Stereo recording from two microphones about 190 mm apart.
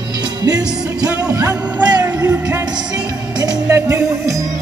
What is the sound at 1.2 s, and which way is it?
Music, 15° right (ahead or behind).